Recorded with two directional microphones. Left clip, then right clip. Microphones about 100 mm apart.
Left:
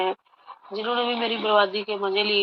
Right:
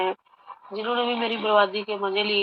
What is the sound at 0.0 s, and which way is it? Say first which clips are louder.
Speech: even; 25° left (ahead or behind).